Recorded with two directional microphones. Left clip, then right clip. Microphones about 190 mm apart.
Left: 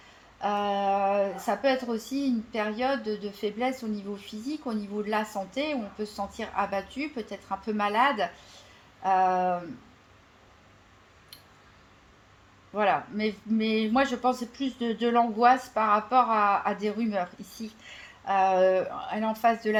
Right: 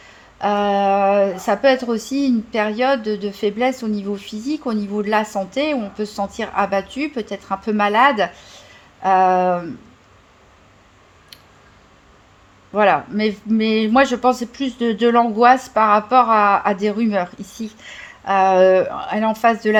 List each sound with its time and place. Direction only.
0.0 s speech: 45° right (ahead or behind)
12.7 s speech: 45° right (ahead or behind)